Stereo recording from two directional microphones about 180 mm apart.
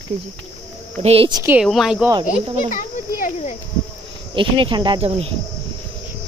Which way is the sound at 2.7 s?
45° left (ahead or behind).